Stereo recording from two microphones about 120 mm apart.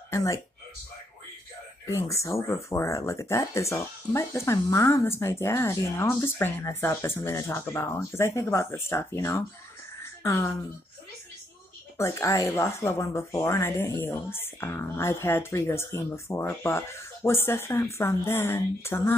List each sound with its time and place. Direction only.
0.1 s speech: 25° left (ahead or behind)
1.9 s speech: 25° left (ahead or behind)
12.0 s speech: 25° left (ahead or behind)